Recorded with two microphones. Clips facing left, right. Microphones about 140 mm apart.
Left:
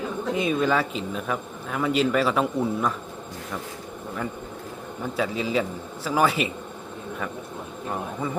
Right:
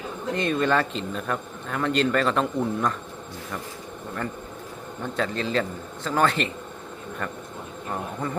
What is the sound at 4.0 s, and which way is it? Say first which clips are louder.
A man's voice: even; 5° left (ahead or behind).